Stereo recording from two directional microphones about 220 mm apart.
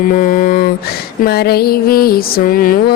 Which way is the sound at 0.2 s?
40° left (ahead or behind).